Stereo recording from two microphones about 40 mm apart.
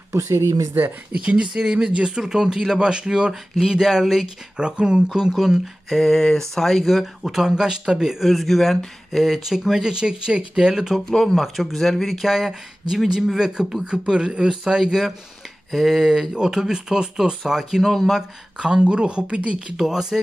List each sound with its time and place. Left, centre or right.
1.1 s speech: right
3.8 s speech: centre
4.6 s speech: right
5.9 s speech: centre
7.2 s speech: centre
8.2 s speech: centre
11.1 s speech: centre
11.4 s speech: centre
18.6 s speech: right
19.8 s speech: centre